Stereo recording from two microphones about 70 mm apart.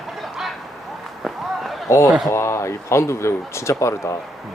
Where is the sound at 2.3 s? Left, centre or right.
Left.